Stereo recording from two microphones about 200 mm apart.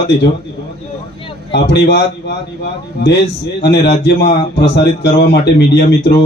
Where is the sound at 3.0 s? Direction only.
55° left (ahead or behind).